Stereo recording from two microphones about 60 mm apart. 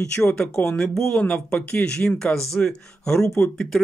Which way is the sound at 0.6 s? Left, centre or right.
Left.